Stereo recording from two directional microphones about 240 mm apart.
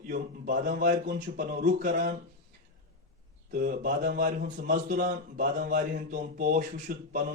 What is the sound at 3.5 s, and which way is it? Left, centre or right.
A man's voice, right.